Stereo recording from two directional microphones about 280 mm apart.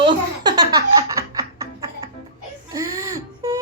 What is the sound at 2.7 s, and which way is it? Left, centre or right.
Whimper, centre.